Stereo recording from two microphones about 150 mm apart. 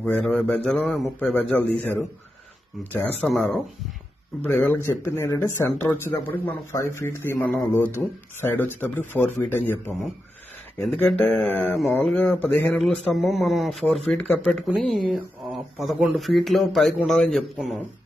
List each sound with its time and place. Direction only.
0.0 s speech: 5° left (ahead or behind)
10.8 s speech: 10° left (ahead or behind)
12.7 s speech: centre (ahead or behind)